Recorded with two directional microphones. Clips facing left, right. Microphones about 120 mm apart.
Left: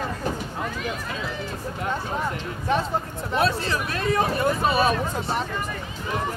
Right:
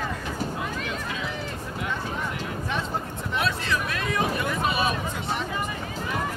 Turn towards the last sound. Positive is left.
turn(degrees=40)  # may be behind; listen again after turning